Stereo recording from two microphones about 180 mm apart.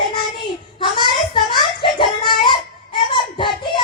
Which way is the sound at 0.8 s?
25° left (ahead or behind).